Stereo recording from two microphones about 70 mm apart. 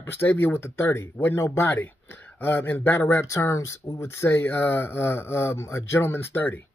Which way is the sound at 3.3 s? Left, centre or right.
Left.